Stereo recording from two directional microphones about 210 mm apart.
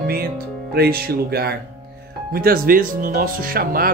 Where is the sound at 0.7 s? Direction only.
45° right (ahead or behind).